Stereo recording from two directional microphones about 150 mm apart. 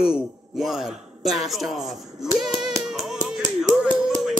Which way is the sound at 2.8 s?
Centre (ahead or behind).